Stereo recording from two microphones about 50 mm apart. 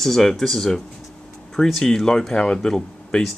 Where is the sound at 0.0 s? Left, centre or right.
Centre.